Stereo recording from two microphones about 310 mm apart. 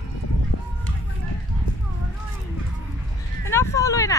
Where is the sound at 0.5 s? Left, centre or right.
Left.